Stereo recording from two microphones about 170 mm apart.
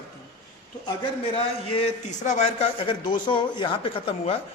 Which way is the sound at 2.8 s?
30° left (ahead or behind).